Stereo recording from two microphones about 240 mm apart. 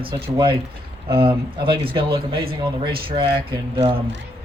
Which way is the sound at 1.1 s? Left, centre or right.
Right.